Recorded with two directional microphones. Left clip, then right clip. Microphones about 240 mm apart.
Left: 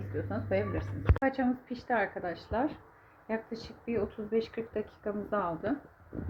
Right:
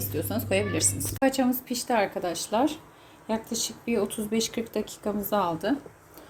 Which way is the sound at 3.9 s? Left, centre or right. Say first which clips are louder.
Right 3 dB; right.